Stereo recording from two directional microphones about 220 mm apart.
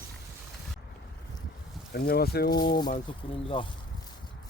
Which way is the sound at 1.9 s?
45° left (ahead or behind).